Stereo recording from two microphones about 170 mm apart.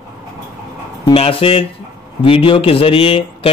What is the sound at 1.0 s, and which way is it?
A man's voice, 35° left (ahead or behind).